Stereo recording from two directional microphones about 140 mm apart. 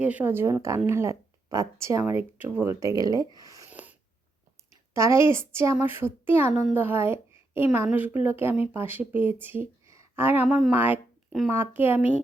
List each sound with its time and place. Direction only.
0.0 s a woman's voice: 10° right (ahead or behind)
3.7 s a sound: 10° right (ahead or behind)
4.9 s a woman's voice: 20° right (ahead or behind)